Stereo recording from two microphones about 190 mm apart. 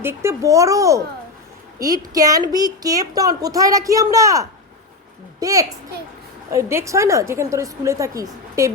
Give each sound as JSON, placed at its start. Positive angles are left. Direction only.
{"t": 0.0, "sound": "a woman's voice", "side_deg": -15}